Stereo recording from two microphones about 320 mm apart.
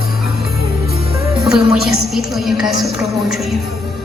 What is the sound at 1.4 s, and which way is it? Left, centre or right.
A woman's voice, centre.